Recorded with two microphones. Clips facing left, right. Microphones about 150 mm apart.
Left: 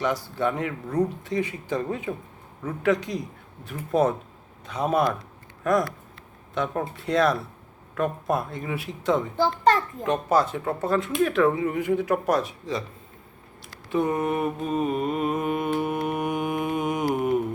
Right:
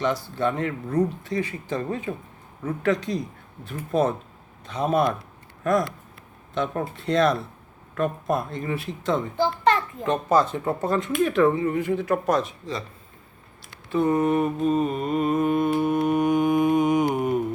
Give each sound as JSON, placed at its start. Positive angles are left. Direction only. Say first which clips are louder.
{"t": 0.0, "sound": "speech", "louder": "right 1 dB", "side_deg": 10}
{"t": 9.4, "sound": "a child's voice", "louder": "even", "side_deg": 40}
{"t": 10.1, "sound": "speech", "louder": "right 1 dB", "side_deg": 10}
{"t": 13.9, "sound": "speech", "louder": "right 3 dB", "side_deg": 10}
{"t": 15.8, "sound": "mantra", "louder": "right 5 dB", "side_deg": 5}